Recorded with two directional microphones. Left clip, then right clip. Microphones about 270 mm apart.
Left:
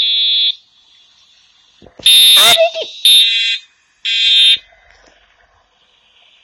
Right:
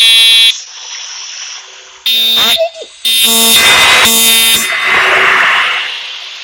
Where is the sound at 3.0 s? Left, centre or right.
Right.